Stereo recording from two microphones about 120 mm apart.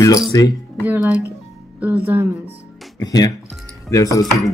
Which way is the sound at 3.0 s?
30° left (ahead or behind).